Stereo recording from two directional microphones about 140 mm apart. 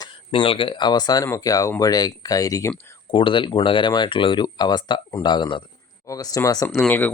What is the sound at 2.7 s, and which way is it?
Speech, 35° left (ahead or behind).